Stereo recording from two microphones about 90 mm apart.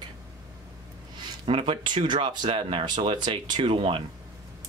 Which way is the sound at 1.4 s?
90° right.